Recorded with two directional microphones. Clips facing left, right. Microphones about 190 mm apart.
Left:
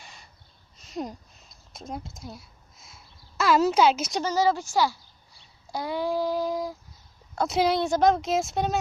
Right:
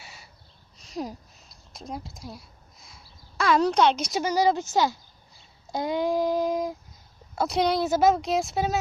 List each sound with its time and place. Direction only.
0.0 s a sound: 5° right (ahead or behind)
4.2 s female singing: 15° right (ahead or behind)
7.3 s speech: centre (ahead or behind)